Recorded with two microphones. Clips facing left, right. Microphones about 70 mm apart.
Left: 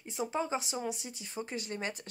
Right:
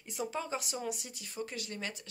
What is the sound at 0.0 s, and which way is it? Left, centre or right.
Speech, left.